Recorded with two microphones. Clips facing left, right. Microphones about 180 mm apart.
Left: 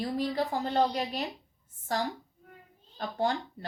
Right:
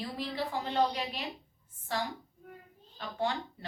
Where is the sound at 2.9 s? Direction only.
40° left (ahead or behind).